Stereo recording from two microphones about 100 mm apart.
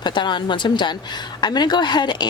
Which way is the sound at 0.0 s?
50° left (ahead or behind).